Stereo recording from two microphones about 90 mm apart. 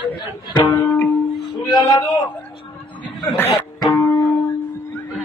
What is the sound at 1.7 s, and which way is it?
Speech, 50° left (ahead or behind).